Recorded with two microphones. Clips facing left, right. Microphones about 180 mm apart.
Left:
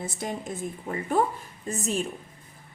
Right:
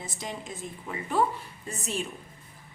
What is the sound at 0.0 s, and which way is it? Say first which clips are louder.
A woman's voice: left 5 dB; 55° left (ahead or behind).